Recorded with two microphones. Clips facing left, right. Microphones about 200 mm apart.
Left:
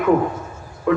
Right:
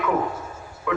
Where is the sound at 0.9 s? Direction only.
40° left (ahead or behind).